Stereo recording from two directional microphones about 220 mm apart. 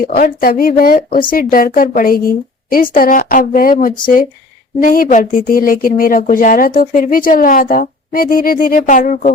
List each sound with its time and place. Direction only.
0.0 s speech: 40° left (ahead or behind)